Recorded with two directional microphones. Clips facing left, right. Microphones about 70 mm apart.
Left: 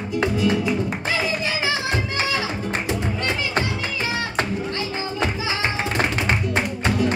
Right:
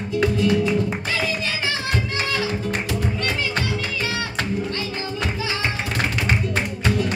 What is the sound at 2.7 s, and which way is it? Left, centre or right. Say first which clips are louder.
Music: even; left.